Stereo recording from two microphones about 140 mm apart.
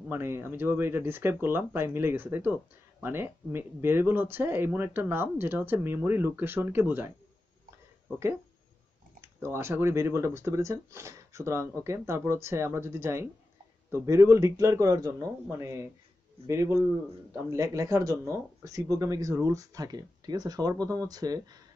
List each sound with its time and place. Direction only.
0.1 s speech: 15° right (ahead or behind)
9.2 s speech: 20° right (ahead or behind)